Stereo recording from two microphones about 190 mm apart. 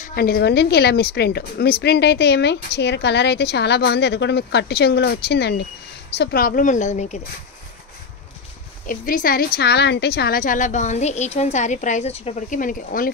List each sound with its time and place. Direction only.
0.0 s speech: 55° left (ahead or behind); by 7.2 s 40° left (ahead or behind)
8.8 s a woman's voice: 45° left (ahead or behind)